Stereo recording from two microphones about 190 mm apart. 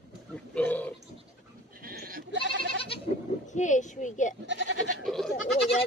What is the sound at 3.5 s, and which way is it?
Speech, 40° left (ahead or behind).